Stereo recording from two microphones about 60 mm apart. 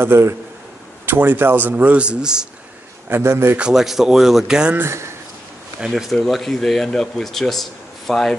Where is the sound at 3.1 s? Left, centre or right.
Right.